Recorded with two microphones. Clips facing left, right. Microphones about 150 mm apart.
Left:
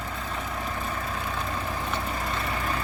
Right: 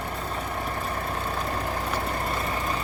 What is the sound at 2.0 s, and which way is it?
Vehicle, 50° right (ahead or behind).